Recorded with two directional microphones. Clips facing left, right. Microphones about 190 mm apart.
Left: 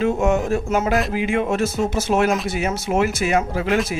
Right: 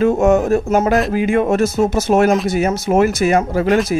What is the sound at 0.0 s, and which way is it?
Speech, 45° right (ahead or behind).